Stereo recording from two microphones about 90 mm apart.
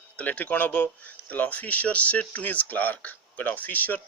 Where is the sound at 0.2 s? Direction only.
15° left (ahead or behind).